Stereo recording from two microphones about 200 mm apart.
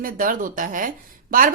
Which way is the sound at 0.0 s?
45° right (ahead or behind).